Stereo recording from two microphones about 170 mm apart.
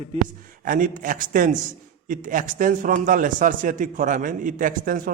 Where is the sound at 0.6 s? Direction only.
50° right (ahead or behind).